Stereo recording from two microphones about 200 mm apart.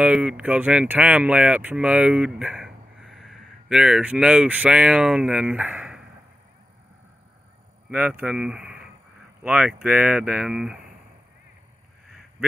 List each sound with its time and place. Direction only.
0.0 s speech: 5° right (ahead or behind)
7.9 s speech: 5° right (ahead or behind)